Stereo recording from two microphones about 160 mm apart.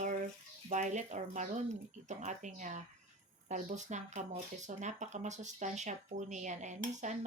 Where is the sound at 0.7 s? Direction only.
50° right (ahead or behind).